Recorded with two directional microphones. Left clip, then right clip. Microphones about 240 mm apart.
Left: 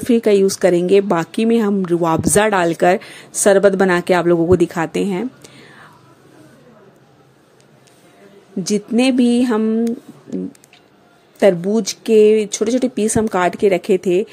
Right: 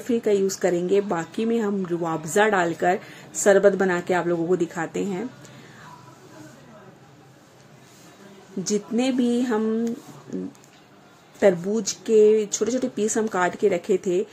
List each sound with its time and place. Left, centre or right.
0.1 s a woman's voice: left
8.6 s a woman's voice: left
11.3 s a woman's voice: left